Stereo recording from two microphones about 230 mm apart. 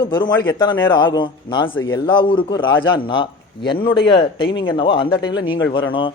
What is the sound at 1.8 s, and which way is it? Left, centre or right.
Speech, left.